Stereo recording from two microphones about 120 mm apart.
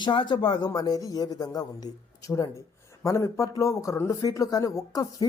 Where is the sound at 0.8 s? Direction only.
30° left (ahead or behind).